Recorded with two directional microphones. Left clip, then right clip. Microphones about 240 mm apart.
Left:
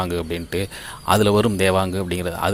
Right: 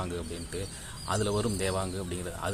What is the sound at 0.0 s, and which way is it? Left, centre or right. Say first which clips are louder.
Speech: left 12 dB; left.